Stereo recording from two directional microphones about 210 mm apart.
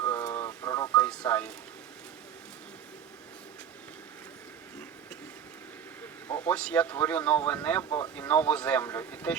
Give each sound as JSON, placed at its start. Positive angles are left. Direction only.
{"t": 0.0, "sound": "radio", "side_deg": 15}
{"t": 0.9, "sound": "a sound", "side_deg": 5}
{"t": 6.2, "sound": "speech", "side_deg": 10}
{"t": 7.9, "sound": "speech", "side_deg": 20}
{"t": 8.1, "sound": "speech", "side_deg": 10}